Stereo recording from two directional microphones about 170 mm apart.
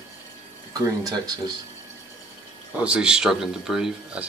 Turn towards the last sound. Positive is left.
turn(degrees=-5)  # may be behind; listen again after turning